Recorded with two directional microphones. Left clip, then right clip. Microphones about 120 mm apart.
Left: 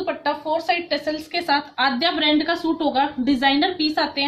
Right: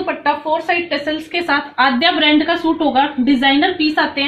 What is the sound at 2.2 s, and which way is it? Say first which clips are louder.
A woman's voice: right 6 dB; 15° left (ahead or behind).